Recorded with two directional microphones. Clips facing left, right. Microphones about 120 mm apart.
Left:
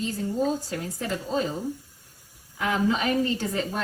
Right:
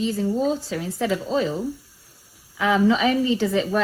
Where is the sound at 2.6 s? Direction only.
90° right.